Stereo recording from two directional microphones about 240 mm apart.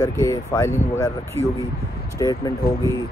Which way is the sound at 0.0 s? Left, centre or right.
Centre.